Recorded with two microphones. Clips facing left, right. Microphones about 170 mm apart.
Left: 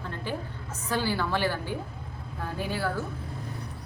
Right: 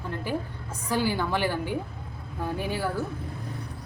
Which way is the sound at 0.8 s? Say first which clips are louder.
Right 2 dB; 15° right (ahead or behind).